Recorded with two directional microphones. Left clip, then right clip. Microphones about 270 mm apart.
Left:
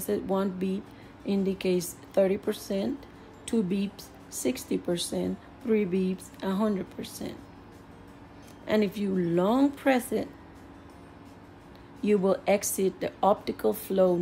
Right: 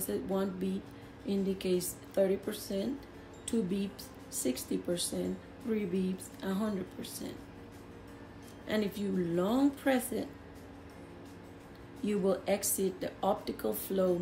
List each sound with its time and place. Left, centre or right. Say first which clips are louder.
0.0 s speech: left 6 dB; left
8.6 s speech: left 7 dB; left
12.0 s speech: left 7 dB; left